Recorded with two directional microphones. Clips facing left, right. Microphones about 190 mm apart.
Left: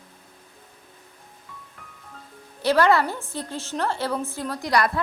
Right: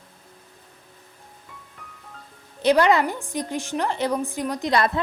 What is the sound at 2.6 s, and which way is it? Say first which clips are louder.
A woman's voice: right 1 dB; 20° right (ahead or behind).